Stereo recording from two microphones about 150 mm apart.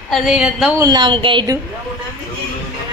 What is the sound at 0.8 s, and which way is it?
Speech, 30° right (ahead or behind).